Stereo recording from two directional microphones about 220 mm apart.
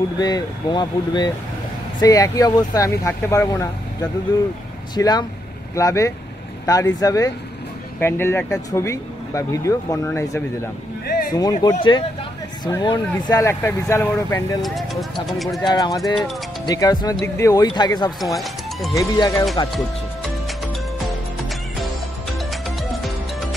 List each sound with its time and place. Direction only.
0.2 s speech: 20° left (ahead or behind)
4.9 s speech: 20° left (ahead or behind)
14.6 s speech: centre (ahead or behind)
15.6 s speech: 15° left (ahead or behind)
18.2 s speech: centre (ahead or behind)
18.9 s speech: 15° left (ahead or behind)
22.5 s music: centre (ahead or behind)